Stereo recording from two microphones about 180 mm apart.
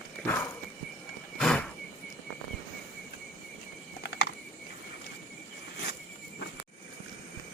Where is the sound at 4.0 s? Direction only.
70° left (ahead or behind).